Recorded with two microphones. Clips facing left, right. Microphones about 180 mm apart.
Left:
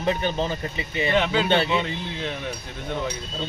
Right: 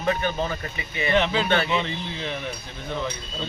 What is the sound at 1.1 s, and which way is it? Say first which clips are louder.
Speech: even; 5° left (ahead or behind).